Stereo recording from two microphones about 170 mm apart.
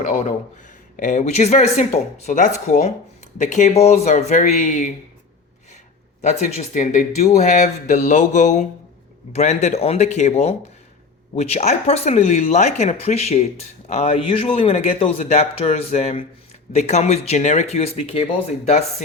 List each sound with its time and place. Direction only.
0.0 s speech: 45° left (ahead or behind)
6.2 s speech: 40° left (ahead or behind)